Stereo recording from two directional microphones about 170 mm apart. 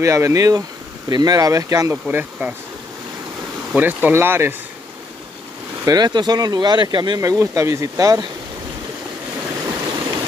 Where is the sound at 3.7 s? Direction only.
10° right (ahead or behind).